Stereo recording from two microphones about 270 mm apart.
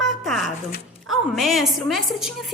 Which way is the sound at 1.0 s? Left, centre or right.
Centre.